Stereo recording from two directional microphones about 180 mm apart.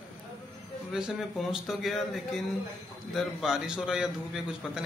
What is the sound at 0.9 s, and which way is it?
A man's voice, centre (ahead or behind).